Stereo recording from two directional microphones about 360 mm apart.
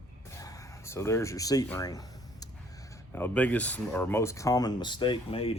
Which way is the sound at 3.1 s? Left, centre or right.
Centre.